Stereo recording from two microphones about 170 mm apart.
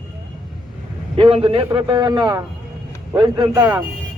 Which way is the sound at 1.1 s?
30° right (ahead or behind).